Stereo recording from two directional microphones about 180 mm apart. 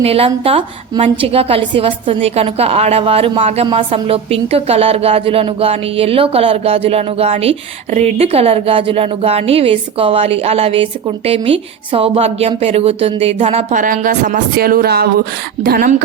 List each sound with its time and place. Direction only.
0.0 s a woman's voice: 35° right (ahead or behind); by 15.9 s 60° right (ahead or behind)